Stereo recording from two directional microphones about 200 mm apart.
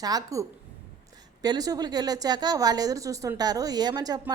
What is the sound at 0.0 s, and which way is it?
A woman's voice, 20° right (ahead or behind).